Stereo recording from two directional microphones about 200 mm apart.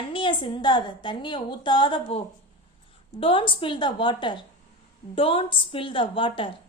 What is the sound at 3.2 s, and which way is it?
A woman's voice, 25° left (ahead or behind).